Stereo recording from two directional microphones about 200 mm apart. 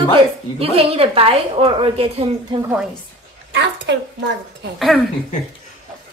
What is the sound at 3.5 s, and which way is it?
A child's voice, 60° right (ahead or behind).